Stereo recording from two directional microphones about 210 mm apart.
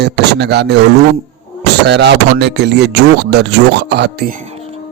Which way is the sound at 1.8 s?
55° right (ahead or behind).